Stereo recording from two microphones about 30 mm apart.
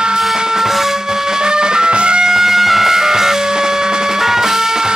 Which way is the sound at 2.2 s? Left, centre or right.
Centre.